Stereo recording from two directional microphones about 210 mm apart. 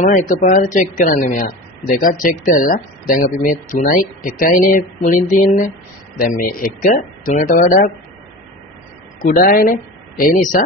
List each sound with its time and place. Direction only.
0.0 s speech: 35° left (ahead or behind)
9.2 s speech: 40° left (ahead or behind)